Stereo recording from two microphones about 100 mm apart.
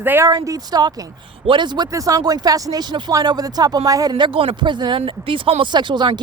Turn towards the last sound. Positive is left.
turn(degrees=-50)  # may be behind; listen again after turning